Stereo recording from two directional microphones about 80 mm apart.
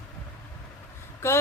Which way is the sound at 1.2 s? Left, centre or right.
Left.